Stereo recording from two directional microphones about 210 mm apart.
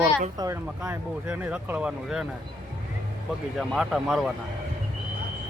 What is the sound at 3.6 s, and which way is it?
Speech, centre (ahead or behind).